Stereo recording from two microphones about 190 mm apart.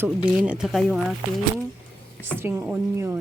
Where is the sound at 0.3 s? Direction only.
5° right (ahead or behind).